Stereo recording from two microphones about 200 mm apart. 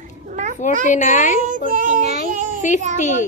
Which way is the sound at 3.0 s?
35° left (ahead or behind).